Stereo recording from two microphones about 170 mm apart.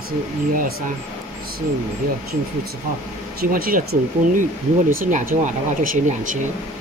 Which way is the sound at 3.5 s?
60° right (ahead or behind).